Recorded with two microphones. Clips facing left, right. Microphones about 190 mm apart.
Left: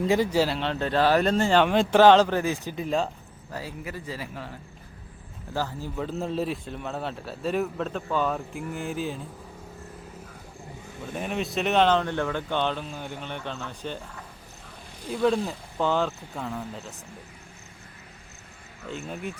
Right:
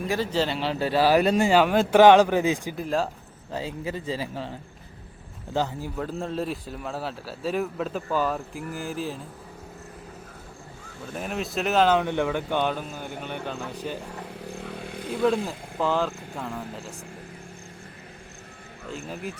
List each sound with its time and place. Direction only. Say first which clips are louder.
0.1 s speech: left 2 dB; 15° left (ahead or behind)
0.5 s speech: right 1 dB; 5° right (ahead or behind)
2.7 s a man's voice: even; centre (ahead or behind)
3.5 s a man's voice: right 5 dB; 25° right (ahead or behind)
5.5 s a man's voice: right 3 dB; 20° right (ahead or behind)
6.1 s a man's voice: left 3 dB; centre (ahead or behind)
11.1 s speech: left 1 dB; centre (ahead or behind)
14.4 s motorcycle: right 12 dB; 85° right
15.2 s a man's voice: even; centre (ahead or behind)
18.9 s a man's voice: even; centre (ahead or behind)